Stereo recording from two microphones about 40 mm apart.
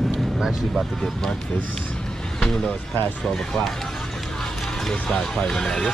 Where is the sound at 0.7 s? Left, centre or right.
Centre.